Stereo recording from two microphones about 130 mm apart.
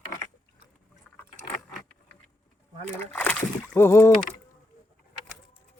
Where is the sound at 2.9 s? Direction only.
15° left (ahead or behind).